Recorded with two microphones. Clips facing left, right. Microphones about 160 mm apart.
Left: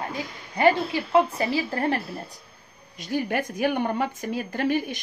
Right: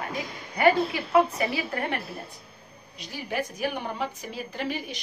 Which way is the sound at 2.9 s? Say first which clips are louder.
Left 5 dB; 50° left (ahead or behind).